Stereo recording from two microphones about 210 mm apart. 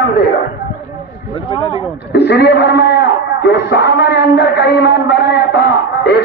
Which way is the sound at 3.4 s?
55° left (ahead or behind).